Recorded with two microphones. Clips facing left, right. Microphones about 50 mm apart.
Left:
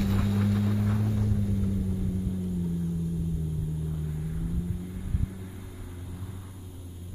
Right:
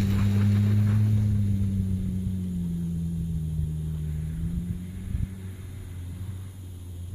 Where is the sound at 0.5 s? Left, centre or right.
Centre.